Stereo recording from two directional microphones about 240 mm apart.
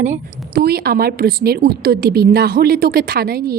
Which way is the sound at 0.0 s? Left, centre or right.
Right.